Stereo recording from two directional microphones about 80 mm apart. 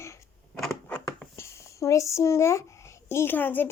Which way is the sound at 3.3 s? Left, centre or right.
Left.